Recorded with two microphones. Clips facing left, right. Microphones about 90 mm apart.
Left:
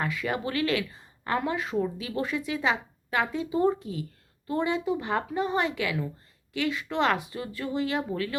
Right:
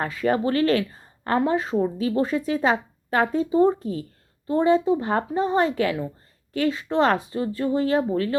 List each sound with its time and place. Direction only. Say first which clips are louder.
0.0 s speech: right 7 dB; 40° right (ahead or behind)